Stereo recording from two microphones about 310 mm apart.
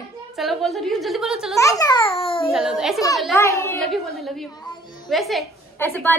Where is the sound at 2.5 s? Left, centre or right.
Centre.